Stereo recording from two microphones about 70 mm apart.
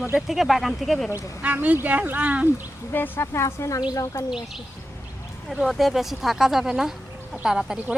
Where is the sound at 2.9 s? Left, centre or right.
Left.